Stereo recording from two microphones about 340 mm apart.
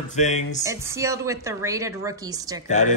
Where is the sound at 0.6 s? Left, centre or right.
Centre.